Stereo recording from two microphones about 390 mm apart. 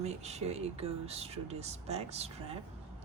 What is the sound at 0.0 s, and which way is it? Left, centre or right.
Speech, centre.